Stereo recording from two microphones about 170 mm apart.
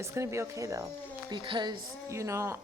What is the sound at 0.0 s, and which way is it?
A woman's voice, 15° right (ahead or behind).